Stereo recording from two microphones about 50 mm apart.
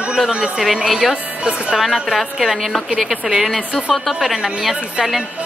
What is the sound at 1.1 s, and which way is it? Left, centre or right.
Speech, right.